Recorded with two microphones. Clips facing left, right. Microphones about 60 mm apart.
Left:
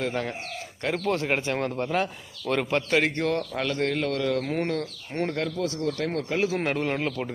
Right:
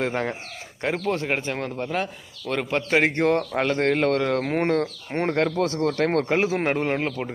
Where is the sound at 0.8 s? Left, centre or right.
Centre.